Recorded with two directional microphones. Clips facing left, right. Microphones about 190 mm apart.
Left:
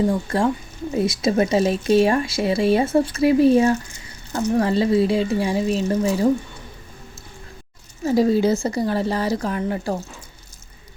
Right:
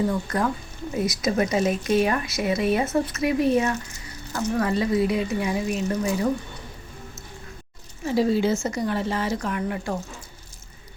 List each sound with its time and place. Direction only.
0.1 s speech: 25° left (ahead or behind)
8.0 s a woman's voice: 40° left (ahead or behind)